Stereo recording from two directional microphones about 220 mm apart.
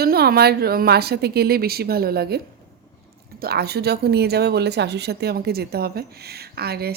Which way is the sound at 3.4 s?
45° right (ahead or behind).